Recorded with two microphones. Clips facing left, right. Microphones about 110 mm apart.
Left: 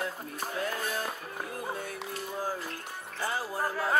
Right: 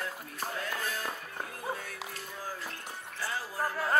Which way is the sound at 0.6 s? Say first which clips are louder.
Left 5 dB; 20° left (ahead or behind).